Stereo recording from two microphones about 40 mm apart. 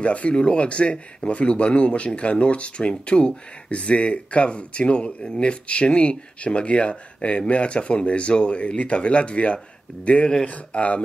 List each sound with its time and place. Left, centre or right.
0.0 s speech: left